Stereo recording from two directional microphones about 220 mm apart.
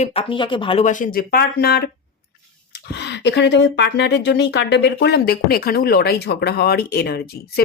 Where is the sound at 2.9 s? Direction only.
50° left (ahead or behind).